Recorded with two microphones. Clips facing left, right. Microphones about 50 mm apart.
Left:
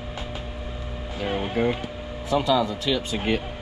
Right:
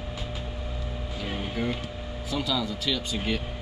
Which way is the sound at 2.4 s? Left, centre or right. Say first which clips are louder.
Left 7 dB; centre.